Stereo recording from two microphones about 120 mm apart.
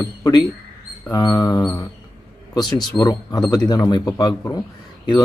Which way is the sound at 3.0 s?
25° left (ahead or behind).